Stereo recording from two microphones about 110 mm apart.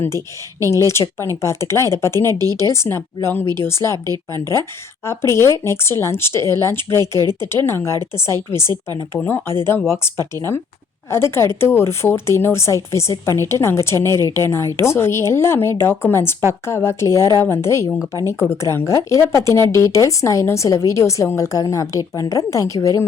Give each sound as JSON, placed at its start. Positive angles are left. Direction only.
{"t": 1.2, "sound": "speech", "side_deg": 25}
{"t": 2.2, "sound": "speech", "side_deg": -35}
{"t": 2.7, "sound": "speech", "side_deg": 25}
{"t": 3.9, "sound": "speech", "side_deg": -35}
{"t": 4.4, "sound": "speech", "side_deg": 25}
{"t": 11.1, "sound": "speech", "side_deg": 25}